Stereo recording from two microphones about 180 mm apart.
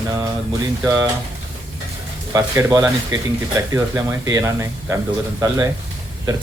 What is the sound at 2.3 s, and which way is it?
Speech, 15° right (ahead or behind).